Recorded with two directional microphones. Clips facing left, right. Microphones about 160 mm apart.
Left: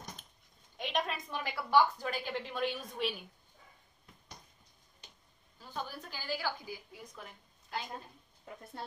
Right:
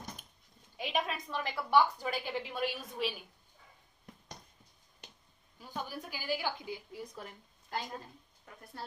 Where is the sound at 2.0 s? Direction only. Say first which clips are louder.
Right 1 dB; 5° right (ahead or behind).